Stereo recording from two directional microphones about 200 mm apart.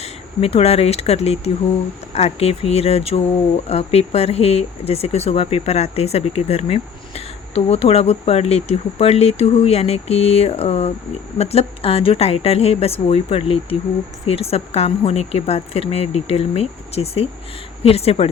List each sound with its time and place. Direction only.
0.0 s speech: 30° left (ahead or behind)